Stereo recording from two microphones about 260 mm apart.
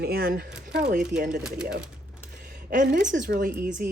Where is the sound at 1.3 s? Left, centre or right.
Centre.